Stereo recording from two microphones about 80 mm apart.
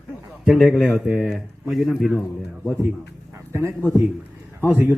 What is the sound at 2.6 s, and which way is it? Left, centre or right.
Speech, left.